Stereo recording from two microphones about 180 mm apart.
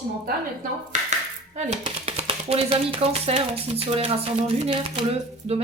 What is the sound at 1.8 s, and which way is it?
Speech, 30° right (ahead or behind).